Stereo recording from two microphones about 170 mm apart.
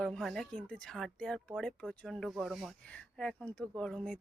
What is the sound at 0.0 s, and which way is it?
Speech, centre (ahead or behind).